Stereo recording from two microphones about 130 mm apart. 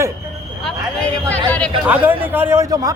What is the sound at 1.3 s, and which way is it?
Speech, 10° left (ahead or behind).